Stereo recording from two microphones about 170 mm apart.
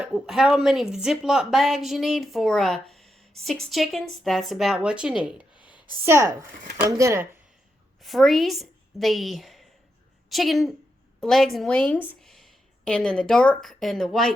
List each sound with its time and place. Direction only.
0.0 s a woman's voice: centre (ahead or behind)
6.1 s speech: 15° right (ahead or behind)
8.0 s a woman's voice: centre (ahead or behind)